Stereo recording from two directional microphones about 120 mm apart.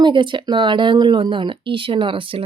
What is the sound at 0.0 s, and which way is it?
Speech, 40° right (ahead or behind).